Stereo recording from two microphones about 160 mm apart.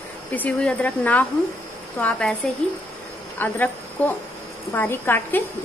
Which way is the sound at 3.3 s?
10° left (ahead or behind).